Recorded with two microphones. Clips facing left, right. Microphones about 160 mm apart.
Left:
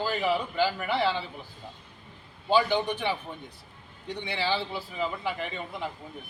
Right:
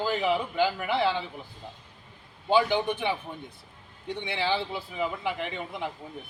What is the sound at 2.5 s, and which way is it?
Speech, 10° right (ahead or behind).